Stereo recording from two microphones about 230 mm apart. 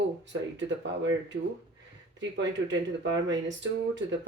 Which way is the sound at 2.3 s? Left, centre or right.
Right.